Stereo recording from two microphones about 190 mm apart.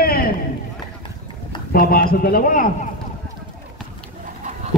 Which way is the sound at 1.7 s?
50° left (ahead or behind).